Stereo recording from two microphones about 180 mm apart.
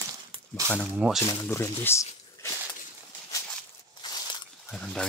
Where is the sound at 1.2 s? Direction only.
15° left (ahead or behind).